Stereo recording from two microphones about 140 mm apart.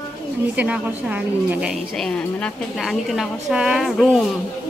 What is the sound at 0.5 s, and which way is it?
Speech, 10° right (ahead or behind).